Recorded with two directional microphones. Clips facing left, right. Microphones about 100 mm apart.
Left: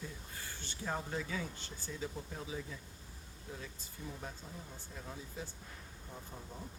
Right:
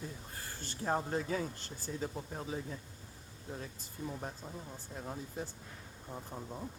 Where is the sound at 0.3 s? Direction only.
40° right (ahead or behind).